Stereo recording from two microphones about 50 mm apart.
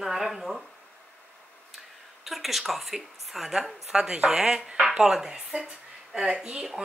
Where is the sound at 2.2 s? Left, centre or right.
Centre.